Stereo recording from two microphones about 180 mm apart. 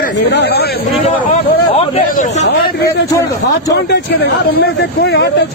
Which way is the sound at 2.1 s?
45° left (ahead or behind).